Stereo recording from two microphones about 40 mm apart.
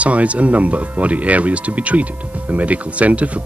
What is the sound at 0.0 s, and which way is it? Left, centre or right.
Speech, right.